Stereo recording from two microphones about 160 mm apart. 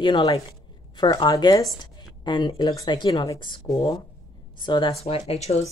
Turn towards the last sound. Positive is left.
turn(degrees=40)  # may be behind; listen again after turning